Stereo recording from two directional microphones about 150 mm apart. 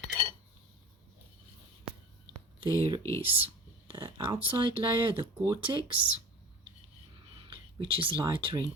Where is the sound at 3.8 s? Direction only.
35° right (ahead or behind).